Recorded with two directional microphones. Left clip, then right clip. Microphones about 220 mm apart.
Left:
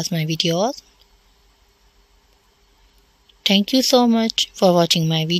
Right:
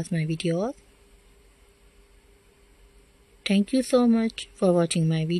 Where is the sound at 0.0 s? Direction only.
40° left (ahead or behind).